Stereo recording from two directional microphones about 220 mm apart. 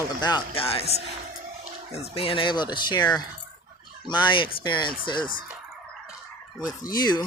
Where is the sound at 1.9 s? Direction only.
25° left (ahead or behind).